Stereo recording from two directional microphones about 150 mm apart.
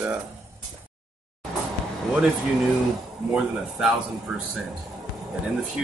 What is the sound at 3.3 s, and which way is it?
Speech, 5° right (ahead or behind).